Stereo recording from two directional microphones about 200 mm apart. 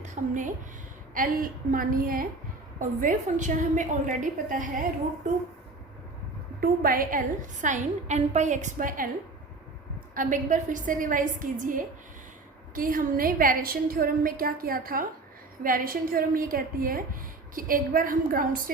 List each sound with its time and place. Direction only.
0.0 s a woman's voice: 40° right (ahead or behind)
6.6 s a woman's voice: 45° right (ahead or behind)
10.2 s a woman's voice: 40° right (ahead or behind)